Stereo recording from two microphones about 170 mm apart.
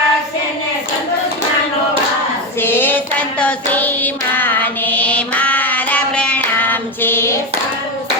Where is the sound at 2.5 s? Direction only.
15° left (ahead or behind).